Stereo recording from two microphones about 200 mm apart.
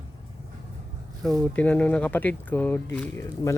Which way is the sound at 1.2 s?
Centre (ahead or behind).